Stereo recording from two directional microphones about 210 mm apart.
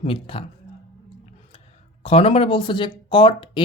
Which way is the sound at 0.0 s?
25° left (ahead or behind).